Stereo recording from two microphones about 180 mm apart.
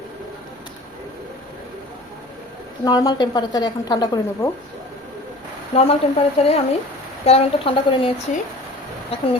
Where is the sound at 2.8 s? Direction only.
20° left (ahead or behind).